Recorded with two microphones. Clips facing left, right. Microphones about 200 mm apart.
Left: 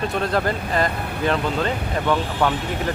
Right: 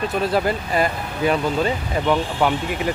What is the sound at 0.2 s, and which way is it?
Speech, 5° right (ahead or behind).